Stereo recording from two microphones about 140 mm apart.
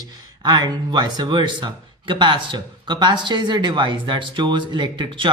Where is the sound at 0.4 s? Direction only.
30° right (ahead or behind).